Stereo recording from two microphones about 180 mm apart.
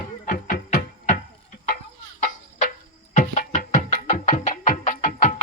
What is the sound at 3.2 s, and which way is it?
Music, 45° left (ahead or behind).